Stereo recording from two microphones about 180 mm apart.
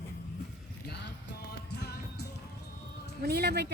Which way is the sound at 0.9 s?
65° left (ahead or behind).